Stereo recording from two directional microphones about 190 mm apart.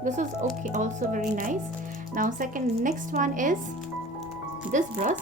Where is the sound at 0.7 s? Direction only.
40° right (ahead or behind).